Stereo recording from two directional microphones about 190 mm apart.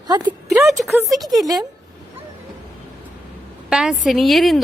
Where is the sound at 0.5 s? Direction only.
Centre (ahead or behind).